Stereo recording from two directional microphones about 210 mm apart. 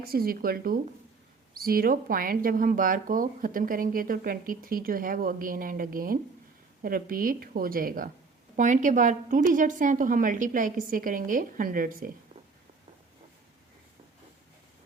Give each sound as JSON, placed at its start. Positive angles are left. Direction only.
{"t": 0.0, "sound": "a woman's voice", "side_deg": -45}